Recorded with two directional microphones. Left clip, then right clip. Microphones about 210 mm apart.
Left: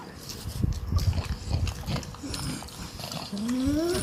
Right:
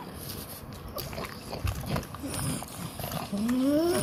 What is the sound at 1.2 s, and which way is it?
Pig, 10° right (ahead or behind).